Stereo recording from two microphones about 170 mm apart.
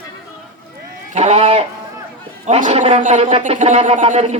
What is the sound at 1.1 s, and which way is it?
Chicken, 40° right (ahead or behind).